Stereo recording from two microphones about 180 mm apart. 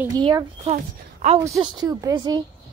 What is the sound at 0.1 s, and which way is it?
A woman's voice, 25° right (ahead or behind).